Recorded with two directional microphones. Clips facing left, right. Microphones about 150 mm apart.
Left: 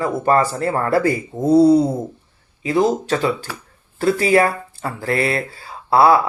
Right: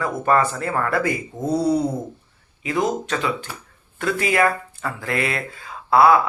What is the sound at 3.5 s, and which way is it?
Speech, 90° left.